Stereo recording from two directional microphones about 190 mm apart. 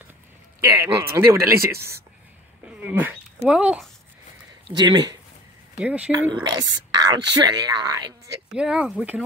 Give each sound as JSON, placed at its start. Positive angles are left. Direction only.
{"t": 0.7, "sound": "speech", "side_deg": -15}
{"t": 2.8, "sound": "speech", "side_deg": -10}
{"t": 4.6, "sound": "speech", "side_deg": -20}
{"t": 5.8, "sound": "speech", "side_deg": -5}
{"t": 6.1, "sound": "speech", "side_deg": -20}
{"t": 8.5, "sound": "speech", "side_deg": -5}